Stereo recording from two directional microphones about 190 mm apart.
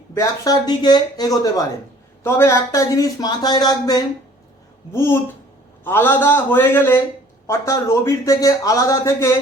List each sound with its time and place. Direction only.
0.1 s speech: 15° left (ahead or behind)